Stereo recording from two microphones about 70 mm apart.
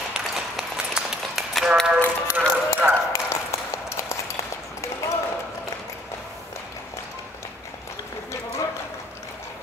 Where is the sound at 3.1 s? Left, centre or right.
Left.